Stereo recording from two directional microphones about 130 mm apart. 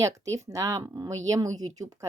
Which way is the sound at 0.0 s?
25° right (ahead or behind).